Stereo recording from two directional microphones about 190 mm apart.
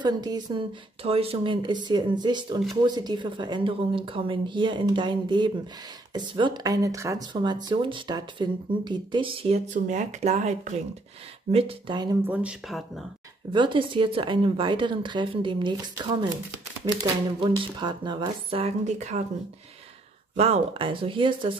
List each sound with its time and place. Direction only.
0.0 s speech: 20° right (ahead or behind); by 10.8 s 35° right (ahead or behind)
11.5 s speech: 25° right (ahead or behind)
12.3 s speech: 5° right (ahead or behind)
13.5 s speech: 25° right (ahead or behind)
17.0 s speech: 25° right (ahead or behind)
20.3 s speech: 35° right (ahead or behind)